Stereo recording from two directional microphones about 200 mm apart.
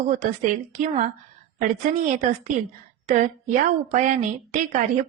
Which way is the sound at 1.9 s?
40° right (ahead or behind).